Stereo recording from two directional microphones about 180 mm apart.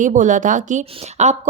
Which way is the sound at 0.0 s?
45° right (ahead or behind).